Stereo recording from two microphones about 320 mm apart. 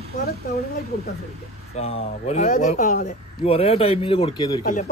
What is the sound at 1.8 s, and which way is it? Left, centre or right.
Speech, centre.